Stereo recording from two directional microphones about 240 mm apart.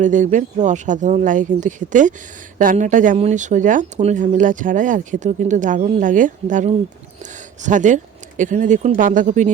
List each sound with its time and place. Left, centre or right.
0.0 s speech: right